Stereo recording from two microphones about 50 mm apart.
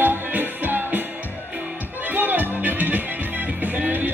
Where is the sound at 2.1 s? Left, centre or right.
Right.